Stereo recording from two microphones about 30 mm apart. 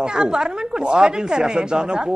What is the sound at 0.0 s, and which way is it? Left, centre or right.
Speech, right.